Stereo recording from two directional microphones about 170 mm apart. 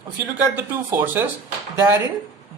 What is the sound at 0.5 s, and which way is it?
Speech, 10° right (ahead or behind).